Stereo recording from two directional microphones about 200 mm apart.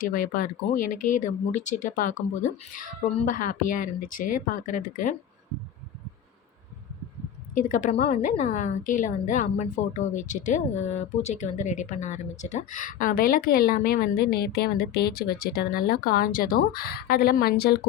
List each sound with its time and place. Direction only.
0.0 s a woman's voice: 45° left (ahead or behind)
7.5 s a woman's voice: 40° left (ahead or behind)